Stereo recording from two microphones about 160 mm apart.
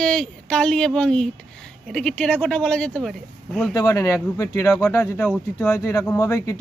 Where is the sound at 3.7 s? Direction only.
20° left (ahead or behind).